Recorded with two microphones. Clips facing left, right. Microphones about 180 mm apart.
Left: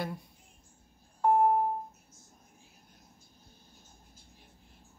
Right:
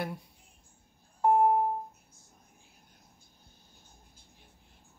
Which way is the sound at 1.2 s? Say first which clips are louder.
Right 1 dB; 10° right (ahead or behind).